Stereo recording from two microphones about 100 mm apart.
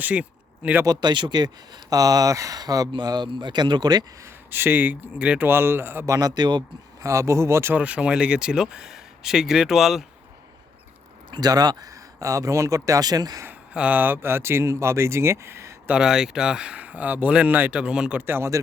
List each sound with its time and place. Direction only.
0.0 s speech: 15° right (ahead or behind)
0.9 s speech: 50° right (ahead or behind)
1.9 s speech: 40° right (ahead or behind)
4.5 s speech: 20° right (ahead or behind)
6.1 s speech: 45° right (ahead or behind)
7.0 s speech: 30° right (ahead or behind)
7.8 s speech: 10° right (ahead or behind)
11.3 s speech: 45° right (ahead or behind)
13.7 s speech: 15° right (ahead or behind)
15.9 s speech: 5° right (ahead or behind)
18.2 s speech: 25° right (ahead or behind)